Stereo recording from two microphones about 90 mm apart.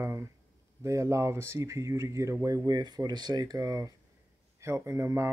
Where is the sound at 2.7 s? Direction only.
50° right (ahead or behind).